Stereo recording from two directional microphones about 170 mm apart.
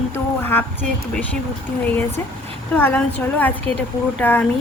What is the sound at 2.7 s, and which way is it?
A woman's voice, 10° left (ahead or behind).